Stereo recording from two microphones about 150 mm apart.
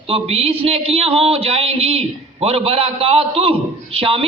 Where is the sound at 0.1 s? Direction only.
40° right (ahead or behind).